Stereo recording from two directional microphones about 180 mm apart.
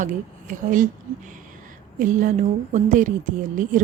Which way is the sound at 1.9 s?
45° right (ahead or behind).